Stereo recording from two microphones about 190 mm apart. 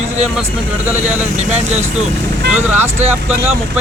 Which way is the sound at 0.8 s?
10° right (ahead or behind).